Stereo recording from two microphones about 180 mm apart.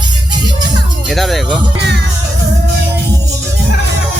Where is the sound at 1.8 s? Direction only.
70° right (ahead or behind).